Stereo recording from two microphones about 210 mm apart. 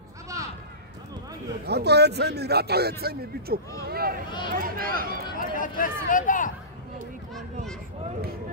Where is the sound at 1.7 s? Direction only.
50° right (ahead or behind).